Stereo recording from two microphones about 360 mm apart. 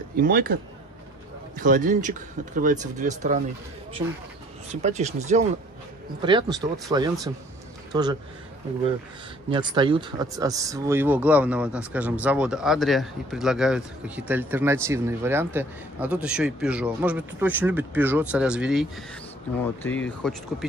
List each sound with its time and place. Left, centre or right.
0.1 s speech: right
1.6 s speech: right
4.6 s a man's voice: centre
9.5 s speech: centre